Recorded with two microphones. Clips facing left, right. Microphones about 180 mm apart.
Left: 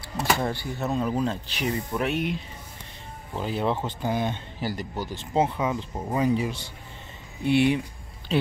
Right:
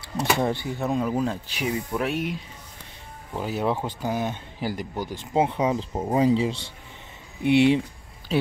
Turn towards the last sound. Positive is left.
turn(degrees=-25)  # may be behind; listen again after turning